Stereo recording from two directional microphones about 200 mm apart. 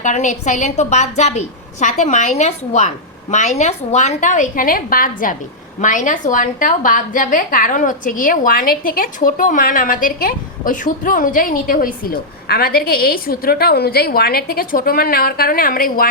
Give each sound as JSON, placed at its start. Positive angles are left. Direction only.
{"t": 0.0, "sound": "a woman's voice", "side_deg": 40}